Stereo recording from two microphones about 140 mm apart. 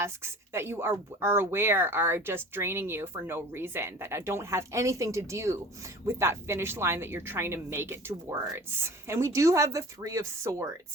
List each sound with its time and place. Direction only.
0.0 s speech: 20° right (ahead or behind)